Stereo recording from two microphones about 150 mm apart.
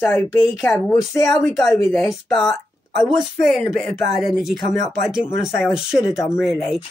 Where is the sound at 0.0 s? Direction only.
15° left (ahead or behind).